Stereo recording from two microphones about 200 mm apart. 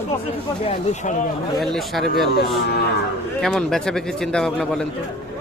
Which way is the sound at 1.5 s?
Centre (ahead or behind).